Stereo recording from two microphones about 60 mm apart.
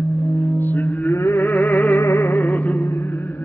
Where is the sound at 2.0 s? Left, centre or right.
Left.